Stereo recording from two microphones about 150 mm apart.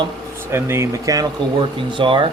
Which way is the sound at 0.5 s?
15° right (ahead or behind).